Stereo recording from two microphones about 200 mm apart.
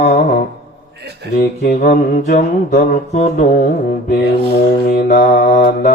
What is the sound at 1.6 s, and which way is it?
Mantra, 45° left (ahead or behind).